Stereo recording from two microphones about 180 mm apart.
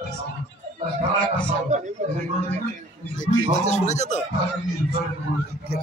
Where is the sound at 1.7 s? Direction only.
40° right (ahead or behind).